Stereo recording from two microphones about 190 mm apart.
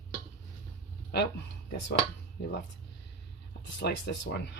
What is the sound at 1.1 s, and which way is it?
Speech, 60° left (ahead or behind).